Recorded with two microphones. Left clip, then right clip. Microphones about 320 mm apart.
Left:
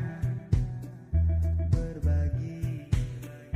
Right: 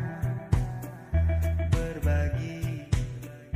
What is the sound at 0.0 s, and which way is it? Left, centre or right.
Music, centre.